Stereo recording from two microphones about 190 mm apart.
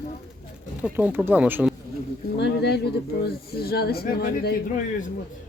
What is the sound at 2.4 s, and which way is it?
Speech, 60° left (ahead or behind).